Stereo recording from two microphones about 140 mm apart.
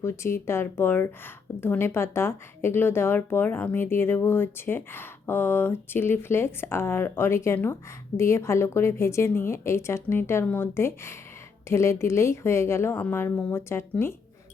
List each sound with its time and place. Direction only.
0.0 s a woman's voice: 20° left (ahead or behind)